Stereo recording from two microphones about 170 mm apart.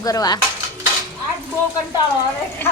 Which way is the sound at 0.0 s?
20° left (ahead or behind).